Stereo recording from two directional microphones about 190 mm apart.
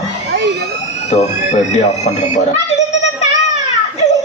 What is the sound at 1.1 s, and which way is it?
Speech, 35° left (ahead or behind).